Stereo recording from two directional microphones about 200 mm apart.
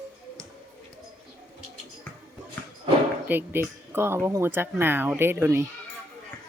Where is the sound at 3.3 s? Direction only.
10° right (ahead or behind).